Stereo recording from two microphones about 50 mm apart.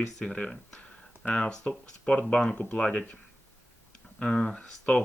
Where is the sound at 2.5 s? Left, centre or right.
Left.